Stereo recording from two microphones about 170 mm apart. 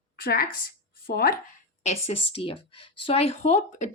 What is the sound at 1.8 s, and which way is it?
Speech, 35° left (ahead or behind).